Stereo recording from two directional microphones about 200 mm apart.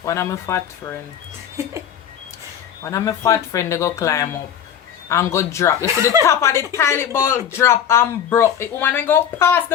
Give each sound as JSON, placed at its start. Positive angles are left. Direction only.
{"t": 0.0, "sound": "speech", "side_deg": 15}
{"t": 2.8, "sound": "speech", "side_deg": 15}
{"t": 5.8, "sound": "speech", "side_deg": -15}
{"t": 6.2, "sound": "speech", "side_deg": 15}